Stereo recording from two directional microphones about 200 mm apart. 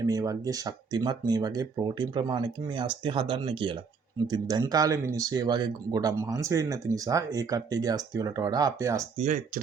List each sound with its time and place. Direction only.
0.0 s speech: 15° right (ahead or behind)
9.1 s speech: 40° right (ahead or behind)